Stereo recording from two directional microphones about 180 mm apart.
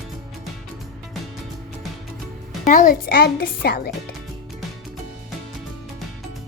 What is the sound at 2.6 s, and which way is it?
Speech, 45° left (ahead or behind).